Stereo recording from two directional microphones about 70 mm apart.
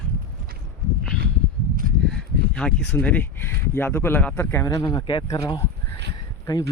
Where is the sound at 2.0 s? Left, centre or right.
Centre.